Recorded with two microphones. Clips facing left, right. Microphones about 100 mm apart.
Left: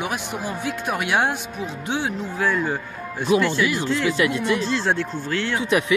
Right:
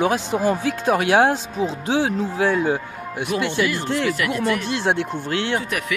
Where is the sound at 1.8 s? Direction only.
90° right.